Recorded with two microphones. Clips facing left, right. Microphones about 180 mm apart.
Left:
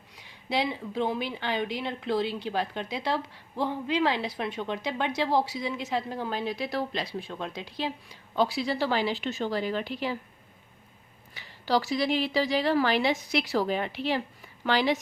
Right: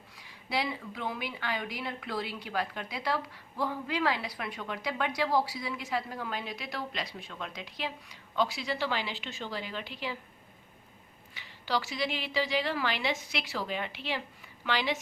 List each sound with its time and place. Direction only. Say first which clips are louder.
0.2 s a woman's voice: left 4 dB; 25° left (ahead or behind); by 10.2 s 45° left (ahead or behind)
11.3 s a woman's voice: left 6 dB; 40° left (ahead or behind)